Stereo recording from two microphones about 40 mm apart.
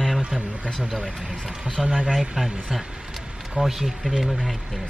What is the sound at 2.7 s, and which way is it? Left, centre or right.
Vehicle, centre.